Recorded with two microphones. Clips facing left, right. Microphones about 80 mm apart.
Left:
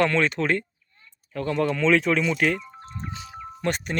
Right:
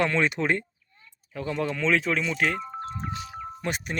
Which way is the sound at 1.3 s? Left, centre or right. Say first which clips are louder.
Left 4 dB; centre.